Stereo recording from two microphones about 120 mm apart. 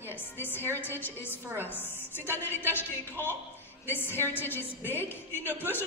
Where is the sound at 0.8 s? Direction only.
15° left (ahead or behind).